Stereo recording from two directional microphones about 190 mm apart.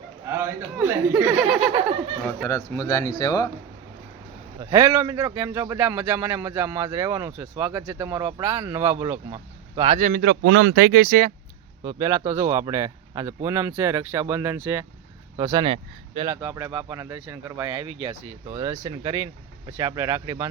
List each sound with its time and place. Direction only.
0.3 s speech: 15° right (ahead or behind)
2.2 s speech: 15° left (ahead or behind)
4.6 s speech: 15° right (ahead or behind)
10.0 s speech: 55° right (ahead or behind)
11.8 s speech: 20° right (ahead or behind)
15.4 s speech: 20° right (ahead or behind)
16.3 s speech: 15° right (ahead or behind)